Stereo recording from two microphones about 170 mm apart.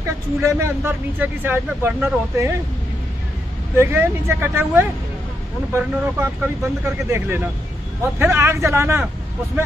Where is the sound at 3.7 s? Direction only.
15° right (ahead or behind).